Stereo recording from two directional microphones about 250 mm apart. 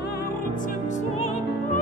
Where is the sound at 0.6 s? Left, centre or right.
Left.